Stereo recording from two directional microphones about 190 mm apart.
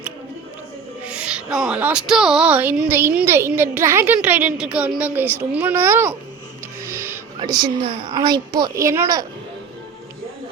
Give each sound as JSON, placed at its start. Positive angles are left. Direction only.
{"t": 1.0, "sound": "a woman's voice", "side_deg": -5}
{"t": 7.3, "sound": "a child's voice", "side_deg": -20}